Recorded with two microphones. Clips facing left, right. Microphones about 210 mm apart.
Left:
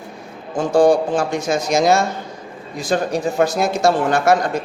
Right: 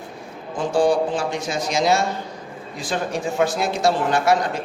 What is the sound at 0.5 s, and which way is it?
A man's voice, 45° left (ahead or behind).